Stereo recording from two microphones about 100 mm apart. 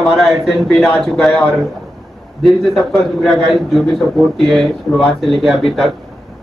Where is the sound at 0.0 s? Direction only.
Centre (ahead or behind).